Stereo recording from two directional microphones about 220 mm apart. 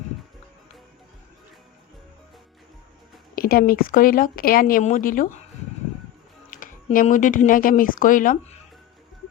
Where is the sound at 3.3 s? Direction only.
40° left (ahead or behind).